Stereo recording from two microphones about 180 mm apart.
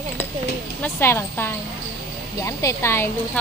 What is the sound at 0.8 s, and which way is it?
Speech, 15° left (ahead or behind).